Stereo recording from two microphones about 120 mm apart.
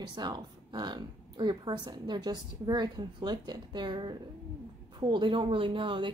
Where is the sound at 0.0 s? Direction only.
35° right (ahead or behind).